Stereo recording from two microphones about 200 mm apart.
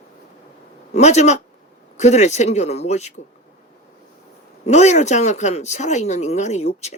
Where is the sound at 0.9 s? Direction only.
35° left (ahead or behind).